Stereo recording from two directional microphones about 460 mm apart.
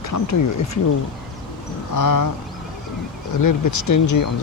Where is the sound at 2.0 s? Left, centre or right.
Left.